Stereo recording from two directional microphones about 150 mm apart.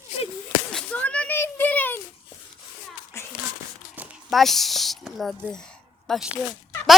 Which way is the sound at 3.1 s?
20° left (ahead or behind).